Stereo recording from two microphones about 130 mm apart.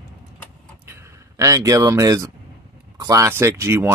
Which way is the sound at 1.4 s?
25° right (ahead or behind).